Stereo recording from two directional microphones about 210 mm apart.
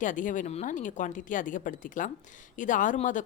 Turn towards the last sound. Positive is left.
turn(degrees=35)  # may be behind; listen again after turning